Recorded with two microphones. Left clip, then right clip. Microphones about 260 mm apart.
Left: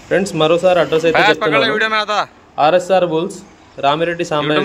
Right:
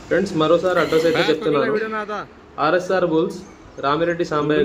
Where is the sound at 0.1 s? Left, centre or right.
Left.